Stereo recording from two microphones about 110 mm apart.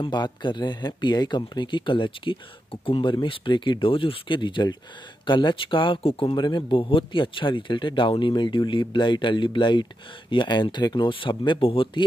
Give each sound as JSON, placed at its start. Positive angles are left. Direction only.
{"t": 0.0, "sound": "speech", "side_deg": 45}